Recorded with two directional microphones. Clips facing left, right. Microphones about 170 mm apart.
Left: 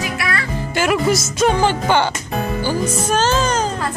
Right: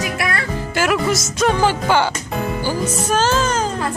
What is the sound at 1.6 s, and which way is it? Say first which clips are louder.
Speech: even; 5° right (ahead or behind).